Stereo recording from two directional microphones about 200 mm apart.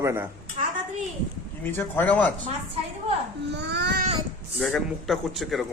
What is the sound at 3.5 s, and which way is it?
Speech, 60° right (ahead or behind).